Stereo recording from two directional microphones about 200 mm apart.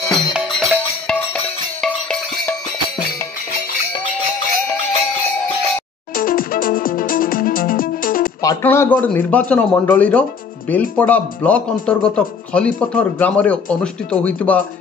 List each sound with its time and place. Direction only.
0.1 s music: centre (ahead or behind)
6.1 s music: 45° left (ahead or behind)
8.4 s speech: 15° left (ahead or behind)